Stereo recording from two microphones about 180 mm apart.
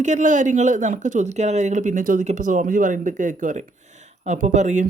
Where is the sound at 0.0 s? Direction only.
45° right (ahead or behind).